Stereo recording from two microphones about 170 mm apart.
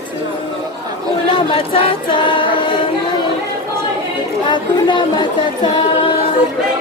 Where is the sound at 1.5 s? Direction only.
35° left (ahead or behind).